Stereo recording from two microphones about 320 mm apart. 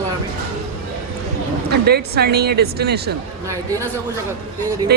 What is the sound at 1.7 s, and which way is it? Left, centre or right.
Speech, right.